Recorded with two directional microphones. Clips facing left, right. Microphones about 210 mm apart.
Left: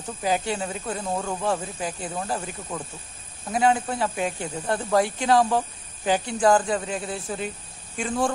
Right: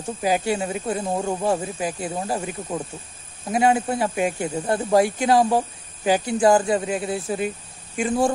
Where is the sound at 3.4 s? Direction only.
10° right (ahead or behind).